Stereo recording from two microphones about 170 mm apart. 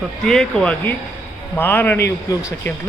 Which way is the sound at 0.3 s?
5° left (ahead or behind).